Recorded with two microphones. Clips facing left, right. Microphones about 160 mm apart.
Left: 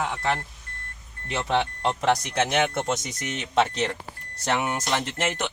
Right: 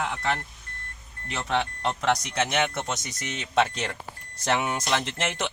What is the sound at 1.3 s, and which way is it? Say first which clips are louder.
Speech: left 3 dB; 25° left (ahead or behind).